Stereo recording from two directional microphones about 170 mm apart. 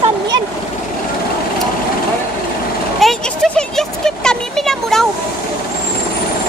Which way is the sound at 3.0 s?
Centre (ahead or behind).